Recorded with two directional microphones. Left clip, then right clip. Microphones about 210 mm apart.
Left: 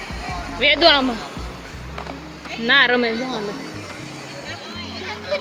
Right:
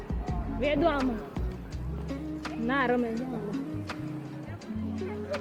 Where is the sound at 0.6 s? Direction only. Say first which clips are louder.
Left 12 dB; 10° left (ahead or behind).